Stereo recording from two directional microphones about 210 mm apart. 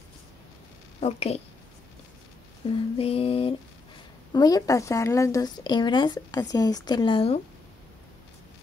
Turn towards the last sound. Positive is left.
turn(degrees=25)  # may be behind; listen again after turning